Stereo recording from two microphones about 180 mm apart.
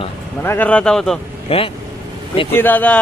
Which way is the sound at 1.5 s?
35° left (ahead or behind).